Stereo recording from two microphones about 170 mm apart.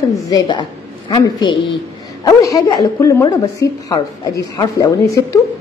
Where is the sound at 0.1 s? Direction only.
25° left (ahead or behind).